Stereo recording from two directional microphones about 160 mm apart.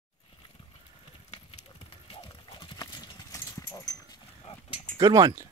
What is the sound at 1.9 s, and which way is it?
Clip-clop, 35° left (ahead or behind).